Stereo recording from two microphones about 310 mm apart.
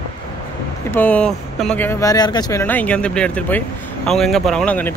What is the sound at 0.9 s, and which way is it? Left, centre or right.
Speech, centre.